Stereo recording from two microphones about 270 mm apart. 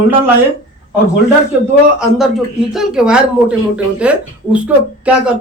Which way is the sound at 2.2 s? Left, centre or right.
Centre.